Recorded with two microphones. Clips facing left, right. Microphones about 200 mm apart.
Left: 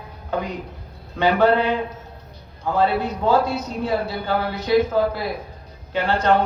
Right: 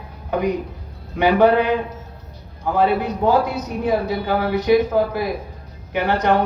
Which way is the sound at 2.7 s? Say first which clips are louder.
Right 2 dB; 15° right (ahead or behind).